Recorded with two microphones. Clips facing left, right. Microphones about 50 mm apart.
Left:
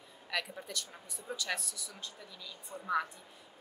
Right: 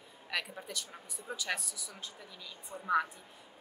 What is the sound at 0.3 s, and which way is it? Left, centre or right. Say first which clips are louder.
A woman's voice: even; centre.